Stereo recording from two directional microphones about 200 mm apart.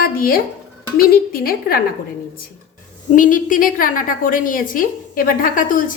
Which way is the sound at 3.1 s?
40° left (ahead or behind).